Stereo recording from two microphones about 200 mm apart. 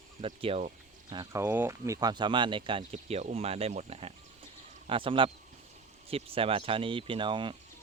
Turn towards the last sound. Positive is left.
turn(degrees=-25)  # may be behind; listen again after turning